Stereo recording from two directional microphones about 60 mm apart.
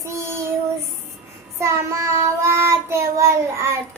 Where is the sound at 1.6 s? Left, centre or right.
Right.